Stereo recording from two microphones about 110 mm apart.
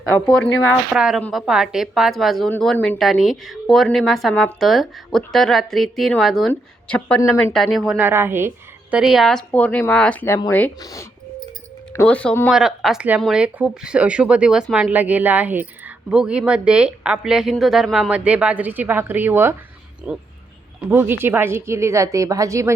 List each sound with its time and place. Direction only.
0.3 s speech: 10° left (ahead or behind)
0.9 s speech: 5° right (ahead or behind)
2.7 s speech: 15° left (ahead or behind)
3.0 s speech: centre (ahead or behind)
7.5 s speech: centre (ahead or behind)
7.9 s a woman's voice: 20° right (ahead or behind)
9.0 s speech: centre (ahead or behind)
9.5 s speech: 15° left (ahead or behind)
10.8 s speech: 35° left (ahead or behind)
12.0 s speech: 10° left (ahead or behind)
12.5 s a woman's voice: 5° right (ahead or behind)
18.1 s a woman's voice: 10° right (ahead or behind)
20.1 s a woman's voice: 10° right (ahead or behind)
20.9 s a woman's voice: 20° right (ahead or behind)